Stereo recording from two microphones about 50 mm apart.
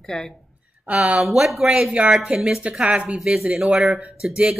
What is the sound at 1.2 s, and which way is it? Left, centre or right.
Speech, centre.